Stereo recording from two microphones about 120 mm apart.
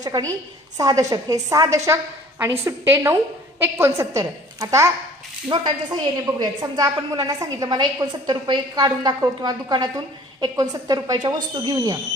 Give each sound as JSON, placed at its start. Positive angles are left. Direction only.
{"t": 0.0, "sound": "a woman's voice", "side_deg": -30}